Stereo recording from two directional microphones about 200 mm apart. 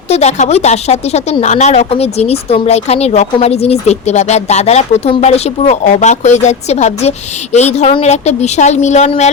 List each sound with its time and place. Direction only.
0.1 s a woman's voice: 35° left (ahead or behind)